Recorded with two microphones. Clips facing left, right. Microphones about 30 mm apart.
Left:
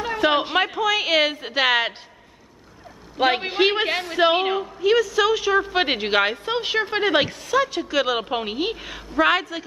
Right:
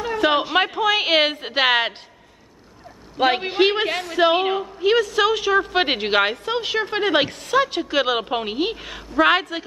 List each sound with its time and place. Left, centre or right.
0.2 s a woman's voice: centre
0.6 s a woman's voice: centre
3.2 s a woman's voice: centre
3.8 s a woman's voice: centre
4.8 s a woman's voice: centre
6.4 s a woman's voice: centre
7.2 s a woman's voice: centre
8.2 s a woman's voice: centre
9.3 s a woman's voice: centre